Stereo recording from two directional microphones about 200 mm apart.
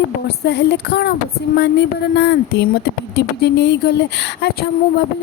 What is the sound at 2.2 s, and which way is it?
Speech, 55° left (ahead or behind).